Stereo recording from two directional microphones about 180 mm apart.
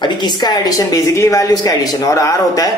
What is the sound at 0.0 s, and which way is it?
Speech, 25° left (ahead or behind).